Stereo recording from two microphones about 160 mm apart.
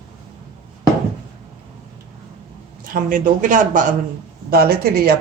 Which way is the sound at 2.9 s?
60° right (ahead or behind).